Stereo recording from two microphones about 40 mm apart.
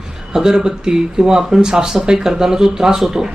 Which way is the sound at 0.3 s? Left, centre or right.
Centre.